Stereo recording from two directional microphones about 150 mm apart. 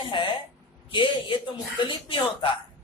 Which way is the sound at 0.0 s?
35° left (ahead or behind).